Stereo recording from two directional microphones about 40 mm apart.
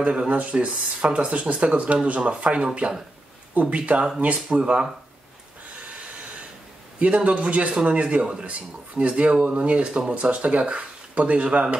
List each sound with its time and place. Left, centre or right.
0.0 s speech: right
7.2 s speech: right